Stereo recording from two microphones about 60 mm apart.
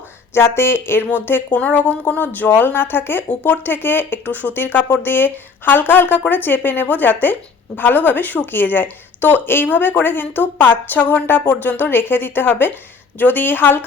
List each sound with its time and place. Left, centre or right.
0.3 s speech: left